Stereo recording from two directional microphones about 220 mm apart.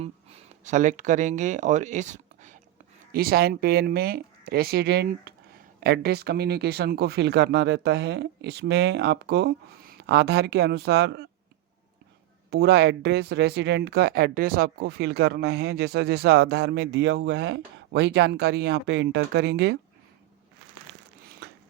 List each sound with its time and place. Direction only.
0.0 s speech: 30° right (ahead or behind); by 11.3 s 50° right (ahead or behind)
12.5 s speech: 50° right (ahead or behind)